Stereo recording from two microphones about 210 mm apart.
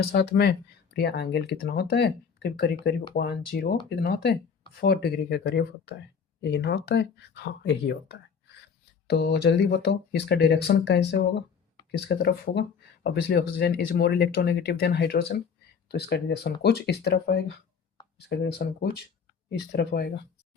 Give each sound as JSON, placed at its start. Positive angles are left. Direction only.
{"t": 0.0, "sound": "speech", "side_deg": 50}